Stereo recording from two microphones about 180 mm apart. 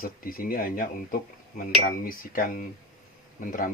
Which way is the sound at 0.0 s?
55° left (ahead or behind).